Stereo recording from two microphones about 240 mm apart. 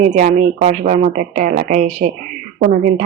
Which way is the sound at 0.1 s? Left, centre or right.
Right.